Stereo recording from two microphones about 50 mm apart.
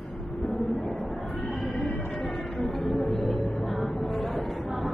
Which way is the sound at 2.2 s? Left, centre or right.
Centre.